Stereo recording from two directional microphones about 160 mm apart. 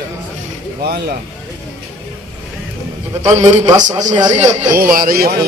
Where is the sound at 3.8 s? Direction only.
50° right (ahead or behind).